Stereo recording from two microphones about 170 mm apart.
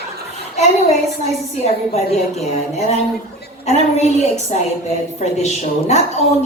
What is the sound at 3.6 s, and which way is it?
A man's voice, 40° left (ahead or behind).